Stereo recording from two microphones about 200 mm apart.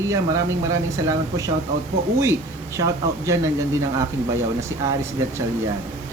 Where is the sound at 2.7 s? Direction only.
15° right (ahead or behind).